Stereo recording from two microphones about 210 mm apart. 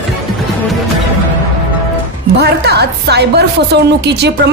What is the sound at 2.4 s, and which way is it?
A woman's voice, 50° right (ahead or behind).